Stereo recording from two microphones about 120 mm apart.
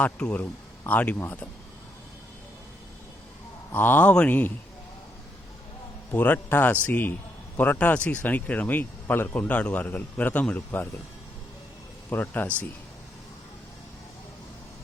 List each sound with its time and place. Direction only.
0.0 s speech: 10° left (ahead or behind)
3.7 s speech: 15° left (ahead or behind)
6.1 s speech: 15° left (ahead or behind)
12.1 s speech: 15° left (ahead or behind)